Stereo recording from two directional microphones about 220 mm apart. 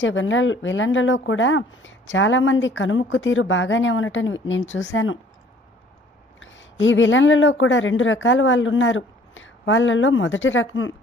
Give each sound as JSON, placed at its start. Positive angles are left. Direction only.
{"t": 0.0, "sound": "speech", "side_deg": 60}
{"t": 6.4, "sound": "speech", "side_deg": 60}